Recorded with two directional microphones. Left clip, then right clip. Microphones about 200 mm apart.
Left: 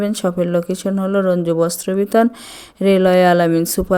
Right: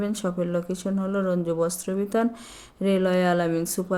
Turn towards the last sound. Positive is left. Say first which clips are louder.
# left 10 dB
turn(degrees=45)  # may be behind; listen again after turning